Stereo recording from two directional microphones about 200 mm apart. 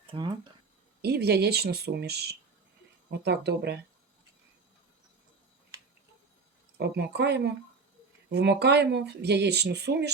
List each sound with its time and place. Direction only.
0.1 s speech: 25° right (ahead or behind)
1.0 s speech: 55° right (ahead or behind)
6.7 s speech: 55° right (ahead or behind)